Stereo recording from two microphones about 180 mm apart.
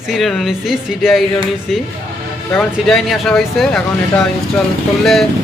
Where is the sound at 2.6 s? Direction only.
Centre (ahead or behind).